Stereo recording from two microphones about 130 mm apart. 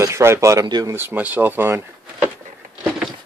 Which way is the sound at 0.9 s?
15° right (ahead or behind).